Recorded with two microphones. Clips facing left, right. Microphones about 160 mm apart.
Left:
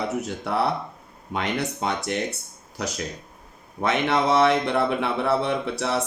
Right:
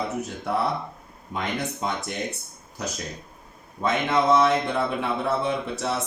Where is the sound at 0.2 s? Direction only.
75° left (ahead or behind).